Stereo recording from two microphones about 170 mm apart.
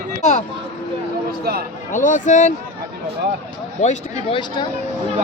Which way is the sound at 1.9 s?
50° left (ahead or behind).